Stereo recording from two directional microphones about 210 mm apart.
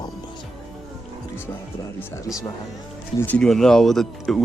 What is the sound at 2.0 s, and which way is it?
Speech, 15° left (ahead or behind).